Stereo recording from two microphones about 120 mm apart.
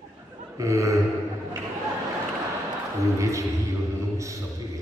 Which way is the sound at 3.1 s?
25° right (ahead or behind).